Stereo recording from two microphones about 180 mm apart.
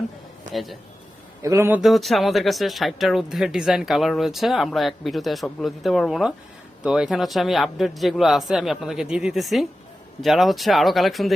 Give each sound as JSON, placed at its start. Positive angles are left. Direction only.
{"t": 0.5, "sound": "speech", "side_deg": 0}
{"t": 1.4, "sound": "a man's voice", "side_deg": -15}
{"t": 1.8, "sound": "speech", "side_deg": 0}